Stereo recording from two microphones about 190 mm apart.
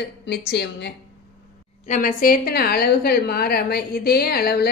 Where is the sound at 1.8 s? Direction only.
40° left (ahead or behind).